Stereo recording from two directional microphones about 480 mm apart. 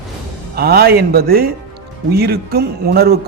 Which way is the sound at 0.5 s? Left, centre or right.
Centre.